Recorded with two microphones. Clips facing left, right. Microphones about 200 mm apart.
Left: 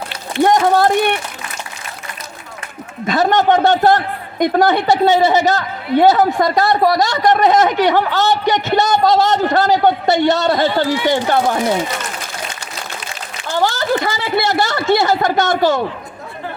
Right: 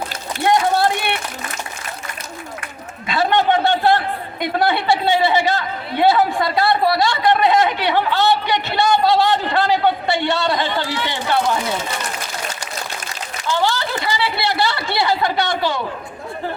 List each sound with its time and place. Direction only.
0.4 s a sound: 45° left (ahead or behind)
3.1 s a woman's voice: 45° left (ahead or behind)
13.5 s speech: 45° left (ahead or behind)